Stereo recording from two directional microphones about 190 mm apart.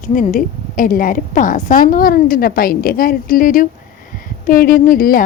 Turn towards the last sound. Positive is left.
turn(degrees=50)  # may be behind; listen again after turning